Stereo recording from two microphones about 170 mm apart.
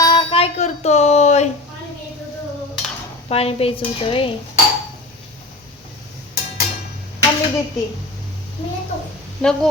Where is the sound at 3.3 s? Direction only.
35° left (ahead or behind).